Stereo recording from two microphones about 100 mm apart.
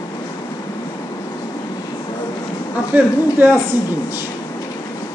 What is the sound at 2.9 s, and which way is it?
Speech, 20° right (ahead or behind).